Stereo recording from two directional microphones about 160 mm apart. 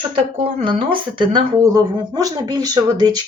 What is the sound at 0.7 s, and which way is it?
Speech, 30° right (ahead or behind).